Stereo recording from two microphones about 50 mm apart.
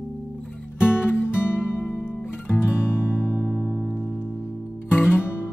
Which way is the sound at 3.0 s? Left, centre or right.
Left.